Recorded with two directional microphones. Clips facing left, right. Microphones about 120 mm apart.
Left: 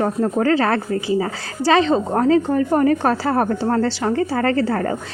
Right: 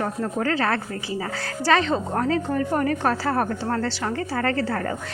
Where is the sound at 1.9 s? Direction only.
30° left (ahead or behind).